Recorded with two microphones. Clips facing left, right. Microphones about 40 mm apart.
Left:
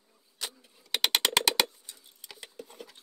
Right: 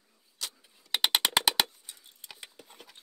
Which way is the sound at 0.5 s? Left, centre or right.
Centre.